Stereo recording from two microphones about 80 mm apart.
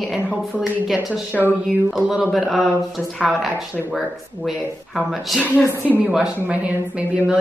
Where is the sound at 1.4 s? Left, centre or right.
Centre.